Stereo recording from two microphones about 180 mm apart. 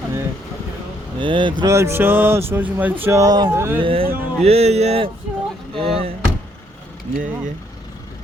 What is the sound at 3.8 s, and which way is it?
Speech, 30° right (ahead or behind).